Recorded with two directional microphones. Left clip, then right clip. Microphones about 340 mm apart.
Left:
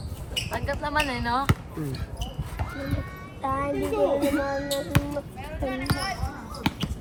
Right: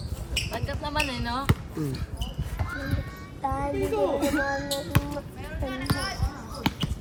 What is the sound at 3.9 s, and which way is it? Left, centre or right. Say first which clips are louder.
Speech: left 3 dB; centre.